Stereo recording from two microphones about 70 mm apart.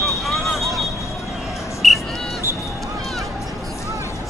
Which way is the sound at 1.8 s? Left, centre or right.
Centre.